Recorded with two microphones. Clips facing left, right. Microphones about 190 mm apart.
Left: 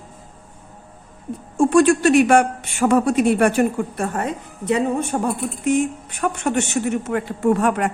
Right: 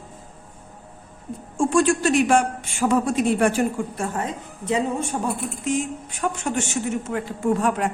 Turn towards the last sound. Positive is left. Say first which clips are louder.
# left 3 dB
turn(degrees=65)  # may be behind; listen again after turning